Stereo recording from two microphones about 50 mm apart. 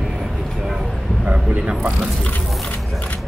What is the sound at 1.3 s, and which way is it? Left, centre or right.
Speech, right.